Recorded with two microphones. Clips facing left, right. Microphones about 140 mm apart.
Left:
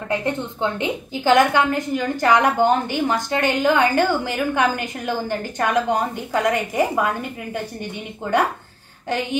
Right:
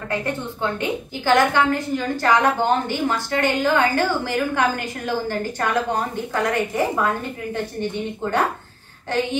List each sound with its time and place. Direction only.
0.1 s a woman's voice: 20° left (ahead or behind)